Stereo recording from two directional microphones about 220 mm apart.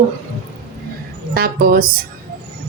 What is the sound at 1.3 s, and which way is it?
Speech, 40° right (ahead or behind).